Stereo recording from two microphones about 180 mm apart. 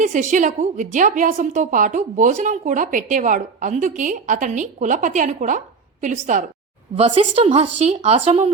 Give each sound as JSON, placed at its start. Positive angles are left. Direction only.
{"t": 0.0, "sound": "a woman's voice", "side_deg": -45}
{"t": 6.9, "sound": "speech", "side_deg": -35}